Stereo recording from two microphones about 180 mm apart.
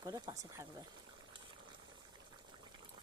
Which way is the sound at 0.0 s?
20° right (ahead or behind).